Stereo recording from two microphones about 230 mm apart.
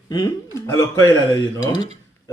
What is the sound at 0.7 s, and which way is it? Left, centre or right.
A man's voice, centre.